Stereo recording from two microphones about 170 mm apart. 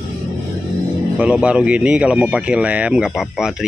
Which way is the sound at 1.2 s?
5° right (ahead or behind).